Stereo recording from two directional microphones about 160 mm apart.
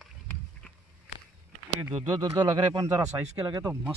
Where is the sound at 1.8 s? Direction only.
20° right (ahead or behind).